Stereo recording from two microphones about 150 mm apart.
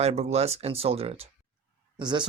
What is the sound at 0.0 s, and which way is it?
Speech, 45° right (ahead or behind).